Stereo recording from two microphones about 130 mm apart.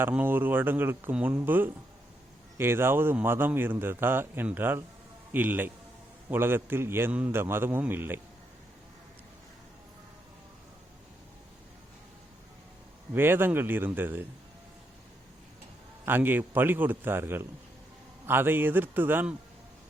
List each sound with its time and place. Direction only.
0.0 s a man's voice: 15° right (ahead or behind)
13.1 s a man's voice: 15° right (ahead or behind)
16.0 s a man's voice: 15° right (ahead or behind)